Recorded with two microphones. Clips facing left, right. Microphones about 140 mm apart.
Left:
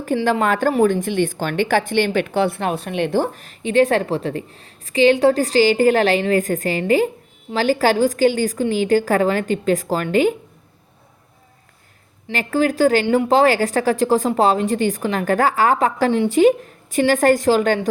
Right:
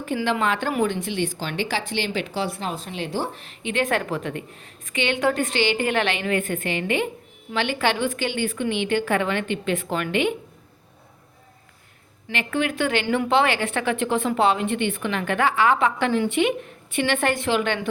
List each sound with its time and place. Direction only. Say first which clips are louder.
0.2 s a woman's voice: left 5 dB; 40° left (ahead or behind)
12.3 s a woman's voice: left 6 dB; 40° left (ahead or behind)